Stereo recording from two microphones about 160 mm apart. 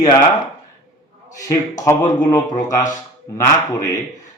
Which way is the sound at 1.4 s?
20° left (ahead or behind).